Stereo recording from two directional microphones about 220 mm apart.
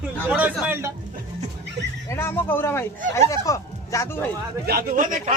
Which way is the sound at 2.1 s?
10° left (ahead or behind).